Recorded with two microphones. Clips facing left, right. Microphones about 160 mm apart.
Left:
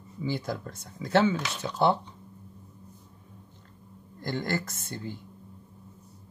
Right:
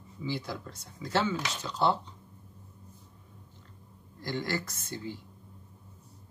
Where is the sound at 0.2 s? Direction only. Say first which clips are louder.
Left 4 dB; 50° left (ahead or behind).